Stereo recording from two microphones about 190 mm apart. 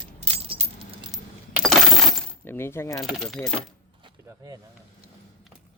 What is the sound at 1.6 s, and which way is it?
Keys jangling, centre (ahead or behind).